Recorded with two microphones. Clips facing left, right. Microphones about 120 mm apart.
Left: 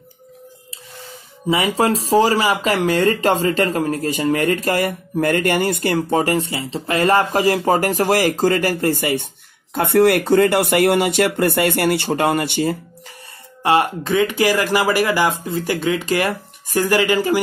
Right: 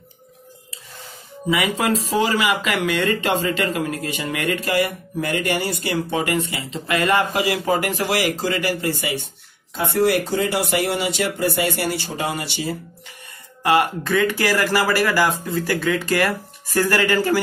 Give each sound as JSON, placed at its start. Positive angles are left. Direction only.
{"t": 1.5, "sound": "speech", "side_deg": 30}
{"t": 13.6, "sound": "speech", "side_deg": 25}